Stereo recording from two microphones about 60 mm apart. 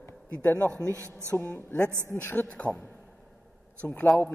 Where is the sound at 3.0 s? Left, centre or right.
Centre.